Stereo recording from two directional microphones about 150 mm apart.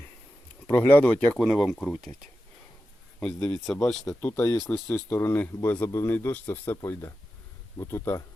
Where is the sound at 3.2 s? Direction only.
5° left (ahead or behind).